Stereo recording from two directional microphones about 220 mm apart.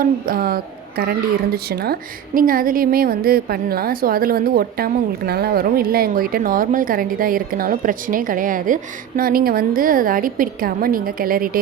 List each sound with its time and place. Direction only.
0.0 s a woman's voice: 40° right (ahead or behind)